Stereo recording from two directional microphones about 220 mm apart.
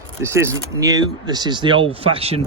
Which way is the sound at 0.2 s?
10° right (ahead or behind).